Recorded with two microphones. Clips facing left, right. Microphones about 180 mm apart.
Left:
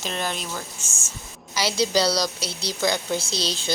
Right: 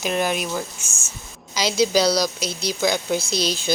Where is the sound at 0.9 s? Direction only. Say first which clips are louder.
Even; centre (ahead or behind).